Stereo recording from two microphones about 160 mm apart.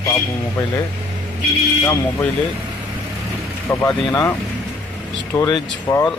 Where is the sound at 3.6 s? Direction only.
20° left (ahead or behind).